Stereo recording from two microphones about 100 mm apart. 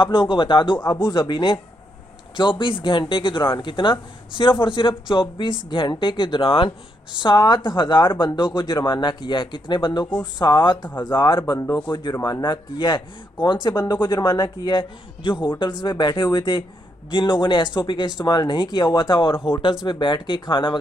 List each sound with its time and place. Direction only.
0.0 s speech: 55° left (ahead or behind)
0.7 s speech: 25° left (ahead or behind)
1.1 s speech: 50° left (ahead or behind)
14.1 s speech: 35° left (ahead or behind)
14.4 s speech: 50° left (ahead or behind)